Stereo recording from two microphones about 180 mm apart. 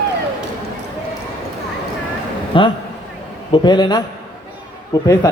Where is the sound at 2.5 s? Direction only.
30° left (ahead or behind).